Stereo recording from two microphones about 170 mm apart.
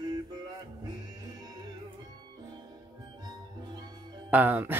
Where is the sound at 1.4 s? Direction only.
25° right (ahead or behind).